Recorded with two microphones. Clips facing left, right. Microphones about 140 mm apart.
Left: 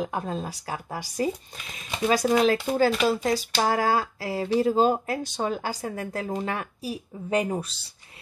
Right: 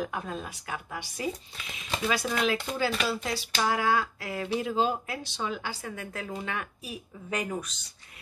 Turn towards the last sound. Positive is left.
turn(degrees=30)  # may be behind; listen again after turning